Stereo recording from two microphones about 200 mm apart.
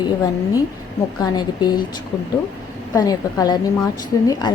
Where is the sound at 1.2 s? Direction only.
20° left (ahead or behind).